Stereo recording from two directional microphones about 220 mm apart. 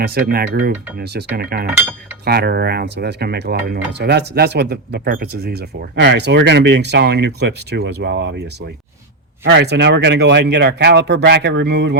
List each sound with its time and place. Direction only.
0.0 s speech: 45° right (ahead or behind)